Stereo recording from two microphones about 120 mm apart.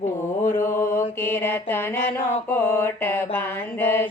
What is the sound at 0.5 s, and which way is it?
Mantra, 20° left (ahead or behind).